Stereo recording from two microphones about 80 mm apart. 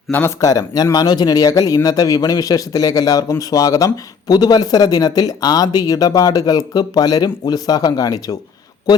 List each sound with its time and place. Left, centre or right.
0.1 s speech: left
0.3 s speech: left